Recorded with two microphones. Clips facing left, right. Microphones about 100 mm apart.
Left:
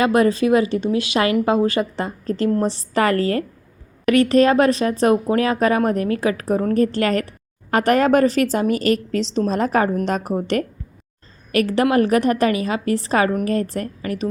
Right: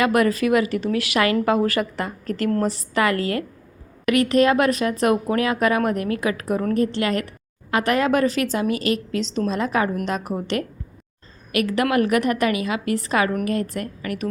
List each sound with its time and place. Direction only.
0.0 s speech: 25° left (ahead or behind)
2.7 s speech: 35° left (ahead or behind)
6.8 s speech: 40° left (ahead or behind)